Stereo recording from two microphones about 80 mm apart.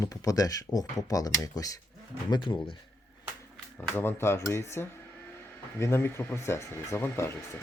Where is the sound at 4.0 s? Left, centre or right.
Left.